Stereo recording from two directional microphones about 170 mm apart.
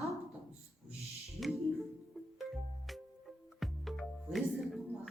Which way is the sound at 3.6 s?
Centre (ahead or behind).